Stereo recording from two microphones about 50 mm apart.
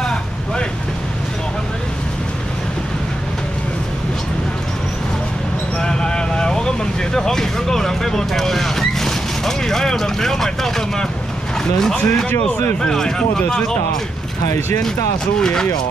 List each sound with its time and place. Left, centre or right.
5.8 s vehicle: centre
11.8 s speech: centre
15.3 s speech: centre